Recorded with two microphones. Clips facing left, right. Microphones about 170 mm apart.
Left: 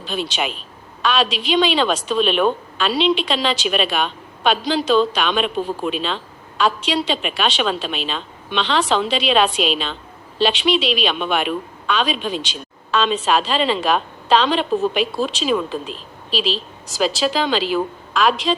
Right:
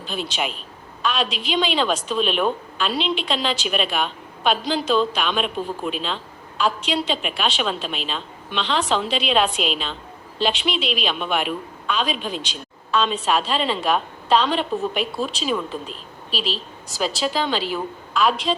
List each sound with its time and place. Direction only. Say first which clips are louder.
0.0 s a woman's voice: left 3 dB; 80° left